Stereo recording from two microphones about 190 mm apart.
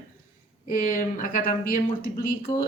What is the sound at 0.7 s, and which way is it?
Speech, 45° left (ahead or behind).